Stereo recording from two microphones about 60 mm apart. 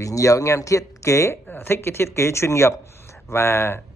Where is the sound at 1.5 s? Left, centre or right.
Left.